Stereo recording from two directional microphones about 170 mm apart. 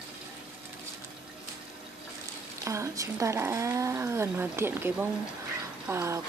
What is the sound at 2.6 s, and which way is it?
Speech, 15° right (ahead or behind).